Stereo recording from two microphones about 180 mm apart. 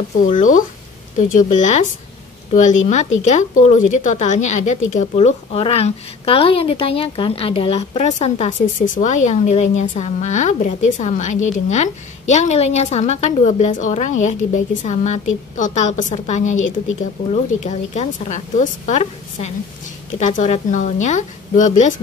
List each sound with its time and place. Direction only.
0.2 s a woman's voice: 45° left (ahead or behind)
3.3 s a woman's voice: 40° left (ahead or behind)